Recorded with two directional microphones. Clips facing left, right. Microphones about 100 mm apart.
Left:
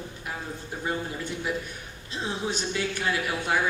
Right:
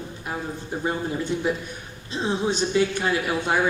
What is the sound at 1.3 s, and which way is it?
A woman's voice, 25° right (ahead or behind).